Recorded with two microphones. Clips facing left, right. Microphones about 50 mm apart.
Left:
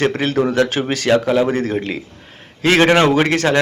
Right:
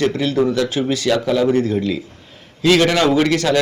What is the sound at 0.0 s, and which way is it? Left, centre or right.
A man's voice, left.